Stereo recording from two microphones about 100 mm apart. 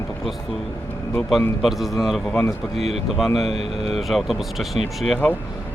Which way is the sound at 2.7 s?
90° right.